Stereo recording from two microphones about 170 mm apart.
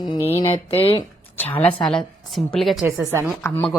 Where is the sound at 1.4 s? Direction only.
10° left (ahead or behind).